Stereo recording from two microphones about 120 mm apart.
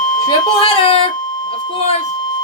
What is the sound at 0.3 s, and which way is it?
Speech, 50° left (ahead or behind).